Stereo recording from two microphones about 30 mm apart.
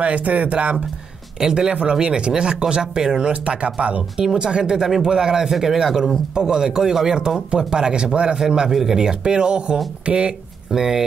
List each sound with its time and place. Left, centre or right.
0.0 s speech: right
1.4 s a man's voice: centre
1.7 s speech: right
3.8 s speech: right
4.4 s speech: right
4.7 s a man's voice: centre
7.2 s speech: right
8.4 s speech: right
10.7 s a man's voice: centre